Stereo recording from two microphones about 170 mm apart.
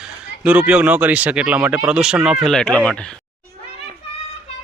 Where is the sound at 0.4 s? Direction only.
10° right (ahead or behind).